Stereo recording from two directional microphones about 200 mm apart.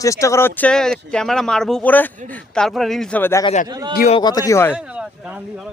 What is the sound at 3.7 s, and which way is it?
Speech, 20° right (ahead or behind).